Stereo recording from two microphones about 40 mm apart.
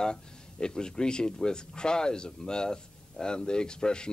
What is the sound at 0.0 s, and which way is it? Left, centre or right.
Speech, left.